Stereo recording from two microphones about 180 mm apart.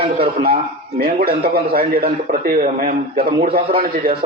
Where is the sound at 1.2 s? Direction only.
60° right (ahead or behind).